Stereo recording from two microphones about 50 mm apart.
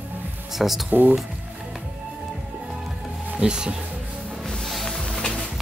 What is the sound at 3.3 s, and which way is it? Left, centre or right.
Speech, centre.